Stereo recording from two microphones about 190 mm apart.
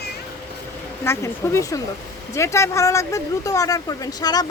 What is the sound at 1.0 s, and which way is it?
Speech, 15° left (ahead or behind).